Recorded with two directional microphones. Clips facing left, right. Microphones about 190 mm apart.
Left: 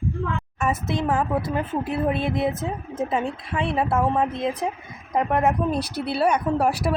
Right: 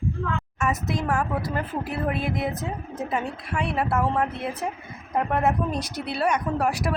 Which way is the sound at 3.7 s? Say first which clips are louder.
Left 2 dB; 15° left (ahead or behind).